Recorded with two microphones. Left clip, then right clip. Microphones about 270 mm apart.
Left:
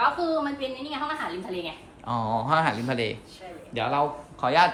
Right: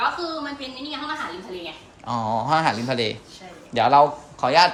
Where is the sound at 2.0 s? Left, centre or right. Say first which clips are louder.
Right 3 dB; centre.